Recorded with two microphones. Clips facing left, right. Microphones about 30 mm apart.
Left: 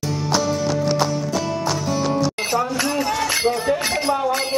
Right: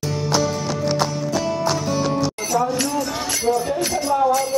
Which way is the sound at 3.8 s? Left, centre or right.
Left.